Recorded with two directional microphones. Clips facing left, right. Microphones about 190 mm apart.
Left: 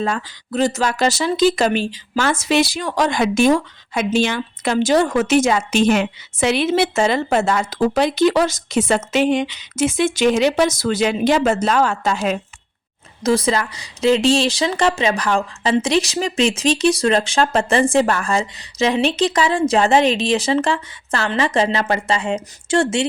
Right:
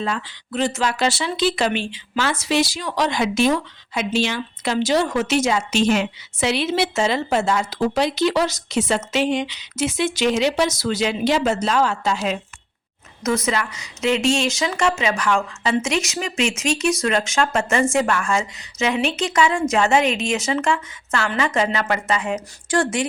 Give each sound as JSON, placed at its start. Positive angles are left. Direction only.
{"t": 0.0, "sound": "speech", "side_deg": 45}
{"t": 13.2, "sound": "speech", "side_deg": 30}